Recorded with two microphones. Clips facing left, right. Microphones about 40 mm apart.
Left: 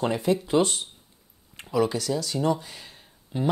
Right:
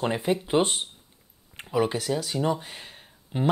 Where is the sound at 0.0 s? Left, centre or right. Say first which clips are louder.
Left 1 dB; right.